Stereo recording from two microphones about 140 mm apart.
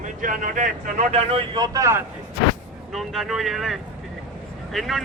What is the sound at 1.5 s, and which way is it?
Speech, 30° right (ahead or behind).